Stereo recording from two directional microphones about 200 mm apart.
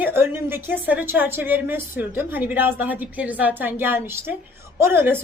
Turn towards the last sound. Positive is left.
turn(degrees=-10)  # may be behind; listen again after turning